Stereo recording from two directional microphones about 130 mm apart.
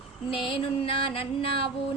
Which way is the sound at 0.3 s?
40° left (ahead or behind).